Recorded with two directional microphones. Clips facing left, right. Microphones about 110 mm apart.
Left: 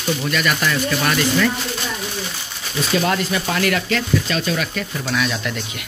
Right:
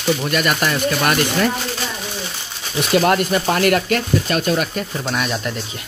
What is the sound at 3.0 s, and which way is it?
Speech, 45° right (ahead or behind).